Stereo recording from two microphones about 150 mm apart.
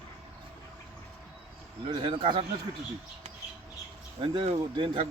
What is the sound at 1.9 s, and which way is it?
Speech, 35° right (ahead or behind).